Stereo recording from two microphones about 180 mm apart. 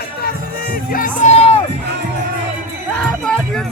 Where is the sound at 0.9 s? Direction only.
45° left (ahead or behind).